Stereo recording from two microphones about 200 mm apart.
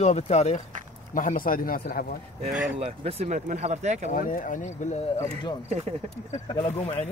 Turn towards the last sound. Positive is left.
turn(degrees=30)  # may be behind; listen again after turning